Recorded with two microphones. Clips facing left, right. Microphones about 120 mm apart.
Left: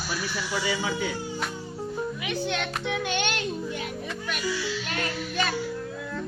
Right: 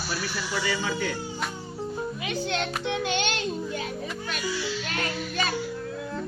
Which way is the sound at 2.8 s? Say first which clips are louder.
Left 1 dB; 30° right (ahead or behind).